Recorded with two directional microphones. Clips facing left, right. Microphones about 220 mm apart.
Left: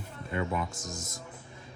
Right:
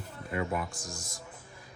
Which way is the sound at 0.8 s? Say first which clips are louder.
Left 3 dB; 20° left (ahead or behind).